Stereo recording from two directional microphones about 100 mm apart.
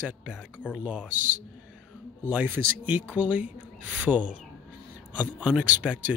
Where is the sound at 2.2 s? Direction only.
15° right (ahead or behind).